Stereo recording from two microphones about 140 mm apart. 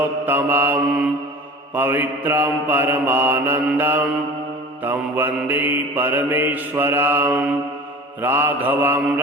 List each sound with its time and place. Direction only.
0.0 s mantra: 15° right (ahead or behind)